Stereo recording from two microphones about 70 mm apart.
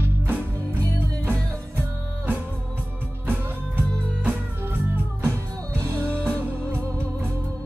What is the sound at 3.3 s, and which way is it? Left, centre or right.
Music, right.